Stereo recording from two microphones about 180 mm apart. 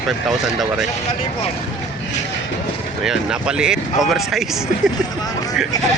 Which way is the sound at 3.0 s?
5° right (ahead or behind).